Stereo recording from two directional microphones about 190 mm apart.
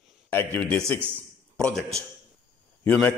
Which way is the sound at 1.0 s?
10° right (ahead or behind).